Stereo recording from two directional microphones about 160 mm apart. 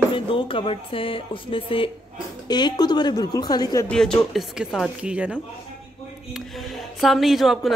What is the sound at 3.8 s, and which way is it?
Speech, 5° left (ahead or behind).